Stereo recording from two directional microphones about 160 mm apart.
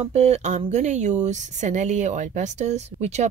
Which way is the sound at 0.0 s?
45° right (ahead or behind).